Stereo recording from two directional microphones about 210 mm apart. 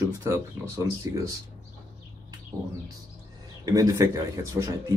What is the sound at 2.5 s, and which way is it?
Speech, 15° right (ahead or behind).